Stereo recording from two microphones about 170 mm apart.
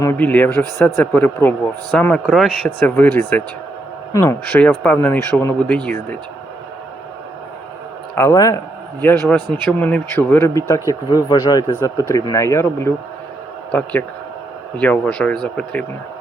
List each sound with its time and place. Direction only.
0.0 s a man's voice: 10° left (ahead or behind)
4.6 s a man's voice: 5° left (ahead or behind)
8.1 s a man's voice: 15° left (ahead or behind)